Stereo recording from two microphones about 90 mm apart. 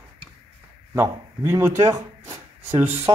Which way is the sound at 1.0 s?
30° right (ahead or behind).